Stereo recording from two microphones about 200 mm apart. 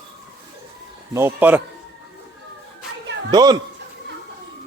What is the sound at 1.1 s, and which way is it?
Speech, 10° right (ahead or behind).